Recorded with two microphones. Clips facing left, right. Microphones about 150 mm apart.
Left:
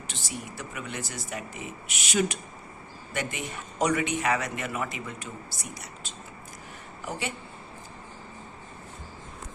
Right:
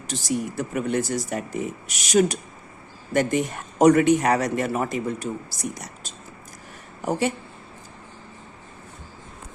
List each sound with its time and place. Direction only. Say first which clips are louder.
0.1 s a man's voice: right 14 dB; 40° right (ahead or behind)